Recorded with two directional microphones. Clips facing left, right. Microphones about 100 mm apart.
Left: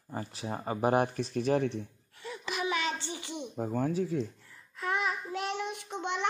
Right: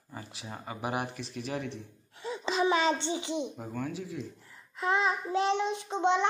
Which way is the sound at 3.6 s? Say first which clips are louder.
Left 6 dB; 35° left (ahead or behind).